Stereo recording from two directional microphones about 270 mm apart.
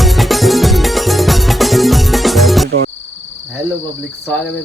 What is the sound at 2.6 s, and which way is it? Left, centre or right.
Music, right.